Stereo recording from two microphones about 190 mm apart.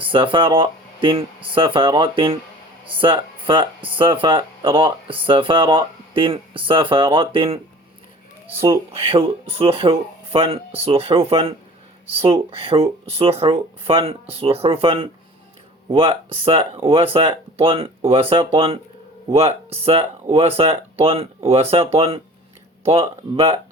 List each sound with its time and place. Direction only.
0.0 s speech: 25° right (ahead or behind)
8.4 s speech: 15° right (ahead or behind)
8.9 s speech: 30° right (ahead or behind)